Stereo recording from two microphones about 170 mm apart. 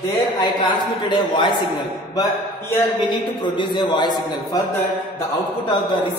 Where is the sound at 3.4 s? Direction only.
25° left (ahead or behind).